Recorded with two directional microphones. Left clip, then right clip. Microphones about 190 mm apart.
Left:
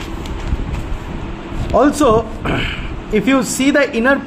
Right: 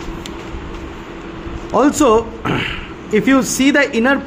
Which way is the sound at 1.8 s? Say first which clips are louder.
Even; 15° right (ahead or behind).